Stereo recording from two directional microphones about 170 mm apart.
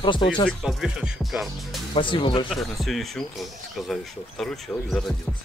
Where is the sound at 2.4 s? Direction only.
Centre (ahead or behind).